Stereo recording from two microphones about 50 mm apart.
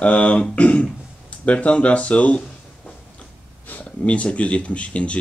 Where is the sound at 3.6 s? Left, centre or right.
Left.